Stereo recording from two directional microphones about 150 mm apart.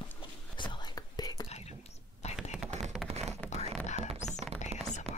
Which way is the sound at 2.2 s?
50° left (ahead or behind).